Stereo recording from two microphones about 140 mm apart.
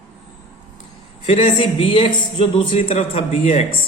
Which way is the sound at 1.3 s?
40° left (ahead or behind).